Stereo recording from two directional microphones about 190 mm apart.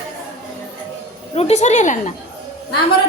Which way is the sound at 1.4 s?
35° left (ahead or behind).